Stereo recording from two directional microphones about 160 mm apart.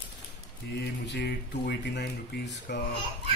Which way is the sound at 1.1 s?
90° left.